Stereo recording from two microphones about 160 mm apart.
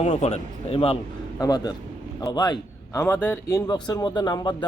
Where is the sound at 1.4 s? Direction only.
25° left (ahead or behind).